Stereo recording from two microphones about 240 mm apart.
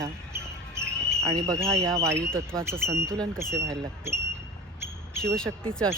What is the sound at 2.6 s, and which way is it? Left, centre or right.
Speech, centre.